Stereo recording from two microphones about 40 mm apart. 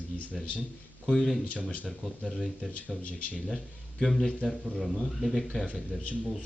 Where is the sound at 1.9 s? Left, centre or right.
Centre.